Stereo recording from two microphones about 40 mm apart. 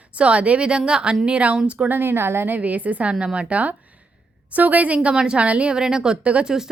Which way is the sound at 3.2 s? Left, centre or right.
Right.